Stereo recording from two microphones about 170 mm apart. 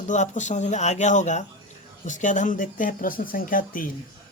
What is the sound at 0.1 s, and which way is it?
Speech, 45° left (ahead or behind).